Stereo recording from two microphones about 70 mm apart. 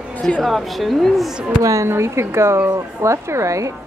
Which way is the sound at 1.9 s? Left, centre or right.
Right.